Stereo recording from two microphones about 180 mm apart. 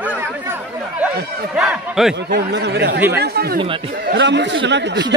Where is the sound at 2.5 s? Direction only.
70° right (ahead or behind).